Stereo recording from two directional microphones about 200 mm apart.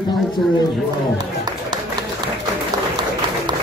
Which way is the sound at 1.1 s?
20° right (ahead or behind).